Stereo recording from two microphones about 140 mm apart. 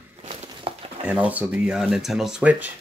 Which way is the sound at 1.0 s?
10° right (ahead or behind).